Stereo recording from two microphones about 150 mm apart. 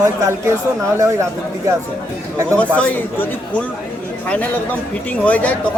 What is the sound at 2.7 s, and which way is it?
Speech, 10° left (ahead or behind).